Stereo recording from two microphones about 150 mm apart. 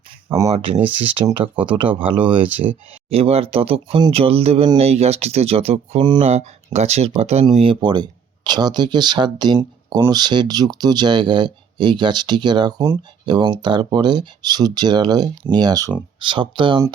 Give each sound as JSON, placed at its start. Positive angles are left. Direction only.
{"t": 0.5, "sound": "speech", "side_deg": -40}